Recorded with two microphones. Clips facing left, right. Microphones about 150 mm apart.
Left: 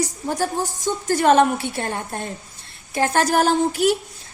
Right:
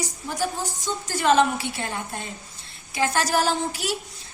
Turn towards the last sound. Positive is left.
turn(degrees=50)  # may be behind; listen again after turning